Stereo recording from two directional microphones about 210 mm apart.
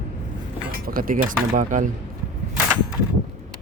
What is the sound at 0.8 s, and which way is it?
Speech, 45° right (ahead or behind).